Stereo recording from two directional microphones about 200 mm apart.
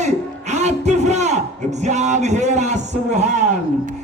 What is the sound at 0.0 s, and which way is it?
Music, 35° right (ahead or behind).